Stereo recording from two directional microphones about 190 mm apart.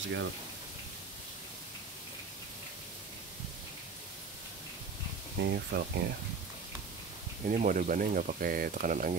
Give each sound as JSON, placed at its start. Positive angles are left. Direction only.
{"t": 5.4, "sound": "speech", "side_deg": -60}
{"t": 7.4, "sound": "speech", "side_deg": -45}